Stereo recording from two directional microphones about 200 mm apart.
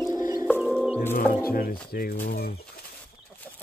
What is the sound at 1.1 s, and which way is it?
Speech, 45° left (ahead or behind).